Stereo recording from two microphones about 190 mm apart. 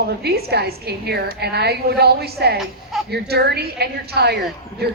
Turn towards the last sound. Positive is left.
turn(degrees=-60)  # may be behind; listen again after turning